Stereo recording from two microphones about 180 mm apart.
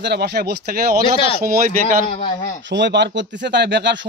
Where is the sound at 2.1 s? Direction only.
35° left (ahead or behind).